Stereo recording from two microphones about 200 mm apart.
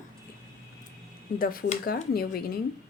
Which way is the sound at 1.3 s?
45° left (ahead or behind).